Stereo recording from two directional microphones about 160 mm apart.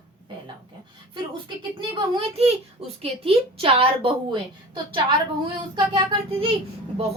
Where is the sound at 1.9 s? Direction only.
35° right (ahead or behind).